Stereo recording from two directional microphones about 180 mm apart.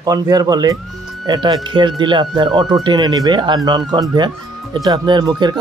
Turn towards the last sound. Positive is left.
turn(degrees=-25)  # may be behind; listen again after turning